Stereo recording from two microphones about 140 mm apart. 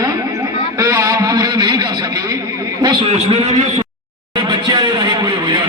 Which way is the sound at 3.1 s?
50° right (ahead or behind).